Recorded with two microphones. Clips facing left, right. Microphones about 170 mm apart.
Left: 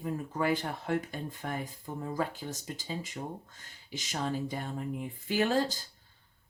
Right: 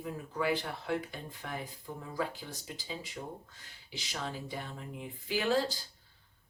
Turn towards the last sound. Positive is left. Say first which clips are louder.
# left 2 dB
turn(degrees=45)  # may be behind; listen again after turning